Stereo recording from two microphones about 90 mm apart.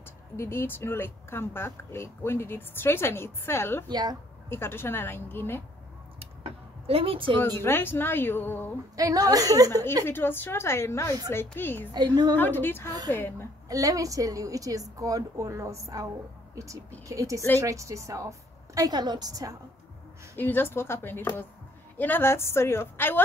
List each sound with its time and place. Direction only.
0.4 s speech: 25° left (ahead or behind)
3.9 s a woman's voice: 50° right (ahead or behind)
4.5 s speech: 25° left (ahead or behind)
6.9 s a woman's voice: 90° right
7.3 s speech: 25° left (ahead or behind)
8.9 s a woman's voice: 45° right (ahead or behind)
10.0 s speech: 25° left (ahead or behind)
11.9 s a woman's voice: 55° right (ahead or behind)
12.4 s speech: 20° left (ahead or behind)
13.7 s a woman's voice: 40° right (ahead or behind)
18.8 s a woman's voice: 50° right (ahead or behind)
20.3 s speech: 20° left (ahead or behind)